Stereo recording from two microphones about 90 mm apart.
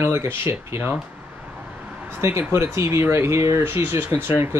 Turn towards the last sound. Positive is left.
turn(degrees=-25)  # may be behind; listen again after turning